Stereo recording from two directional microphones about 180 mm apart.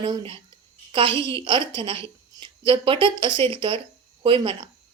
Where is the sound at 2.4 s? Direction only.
25° right (ahead or behind).